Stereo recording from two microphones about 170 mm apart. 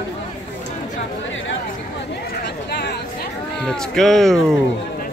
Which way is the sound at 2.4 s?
80° left.